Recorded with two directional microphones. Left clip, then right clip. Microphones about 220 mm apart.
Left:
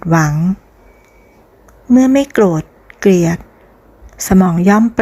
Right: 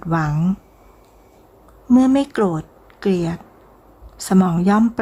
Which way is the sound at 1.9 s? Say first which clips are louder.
Left 5 dB; 15° left (ahead or behind).